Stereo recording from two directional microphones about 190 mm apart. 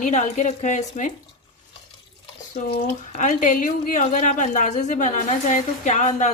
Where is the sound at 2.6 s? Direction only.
40° left (ahead or behind).